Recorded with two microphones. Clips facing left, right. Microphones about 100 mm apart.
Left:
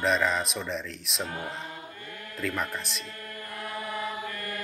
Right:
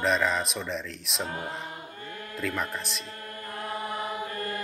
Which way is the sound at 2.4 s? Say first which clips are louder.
Even; centre (ahead or behind).